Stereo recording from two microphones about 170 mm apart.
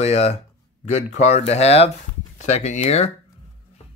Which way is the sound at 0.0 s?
40° left (ahead or behind).